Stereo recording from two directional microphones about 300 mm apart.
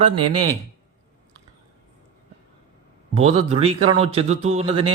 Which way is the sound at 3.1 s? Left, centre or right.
Centre.